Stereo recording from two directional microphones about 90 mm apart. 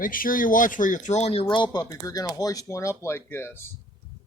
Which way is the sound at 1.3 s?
65° left (ahead or behind).